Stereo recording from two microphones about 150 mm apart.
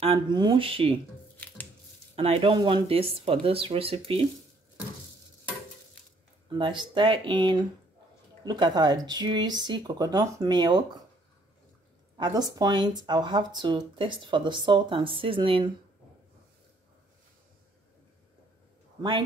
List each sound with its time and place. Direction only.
0.0 s speech: 35° right (ahead or behind)
2.1 s speech: 40° right (ahead or behind)
6.6 s speech: 30° right (ahead or behind)
12.2 s speech: 30° right (ahead or behind)
18.9 s speech: 35° right (ahead or behind)